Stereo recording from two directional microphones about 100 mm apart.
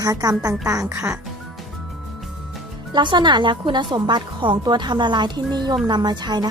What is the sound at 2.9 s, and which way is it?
Speech, 50° right (ahead or behind).